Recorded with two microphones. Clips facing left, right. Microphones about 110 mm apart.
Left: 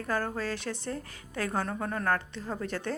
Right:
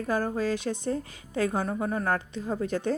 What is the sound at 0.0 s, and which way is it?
Speech, 15° right (ahead or behind).